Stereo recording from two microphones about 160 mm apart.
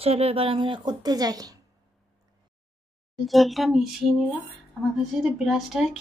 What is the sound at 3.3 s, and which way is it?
A woman's voice, centre (ahead or behind).